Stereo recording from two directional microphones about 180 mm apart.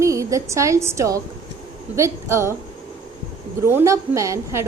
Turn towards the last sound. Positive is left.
turn(degrees=-15)  # may be behind; listen again after turning